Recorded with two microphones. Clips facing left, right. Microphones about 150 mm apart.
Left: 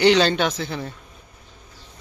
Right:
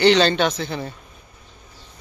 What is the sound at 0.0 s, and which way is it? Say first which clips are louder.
Speech: right 1 dB; 10° left (ahead or behind).